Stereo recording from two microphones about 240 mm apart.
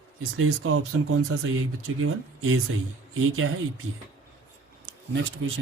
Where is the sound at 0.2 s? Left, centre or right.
Right.